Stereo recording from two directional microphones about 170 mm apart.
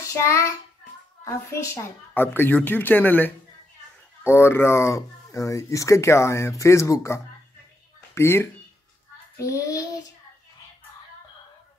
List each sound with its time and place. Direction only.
0.1 s speech: 15° left (ahead or behind)
9.4 s child singing: 20° left (ahead or behind)